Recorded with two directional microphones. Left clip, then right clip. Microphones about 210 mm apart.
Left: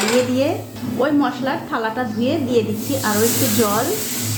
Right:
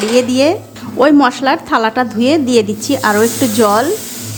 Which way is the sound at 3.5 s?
40° right (ahead or behind).